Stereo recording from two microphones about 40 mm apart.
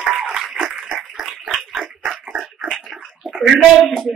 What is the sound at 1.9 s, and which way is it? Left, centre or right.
Dog, right.